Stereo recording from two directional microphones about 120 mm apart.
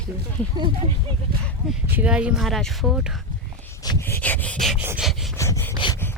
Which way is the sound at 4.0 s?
15° left (ahead or behind).